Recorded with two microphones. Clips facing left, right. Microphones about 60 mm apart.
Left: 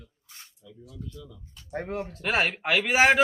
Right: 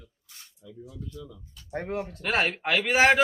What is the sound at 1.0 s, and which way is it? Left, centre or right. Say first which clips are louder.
Speech: right 2 dB; right.